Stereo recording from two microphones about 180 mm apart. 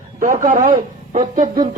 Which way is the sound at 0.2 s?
50° right (ahead or behind).